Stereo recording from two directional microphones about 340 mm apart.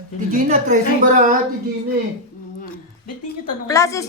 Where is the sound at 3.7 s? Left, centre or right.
Centre.